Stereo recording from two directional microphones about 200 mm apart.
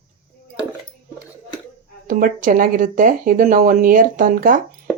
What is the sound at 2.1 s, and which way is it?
Speech, 45° right (ahead or behind).